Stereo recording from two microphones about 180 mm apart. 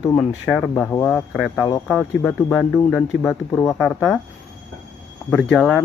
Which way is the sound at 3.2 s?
15° left (ahead or behind).